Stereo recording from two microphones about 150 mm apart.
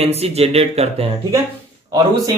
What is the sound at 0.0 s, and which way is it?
Speech, 45° right (ahead or behind).